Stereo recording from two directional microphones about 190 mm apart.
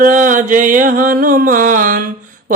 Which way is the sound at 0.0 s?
45° right (ahead or behind).